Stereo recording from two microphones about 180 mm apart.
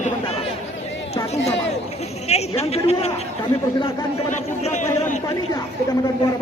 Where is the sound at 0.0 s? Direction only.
35° left (ahead or behind).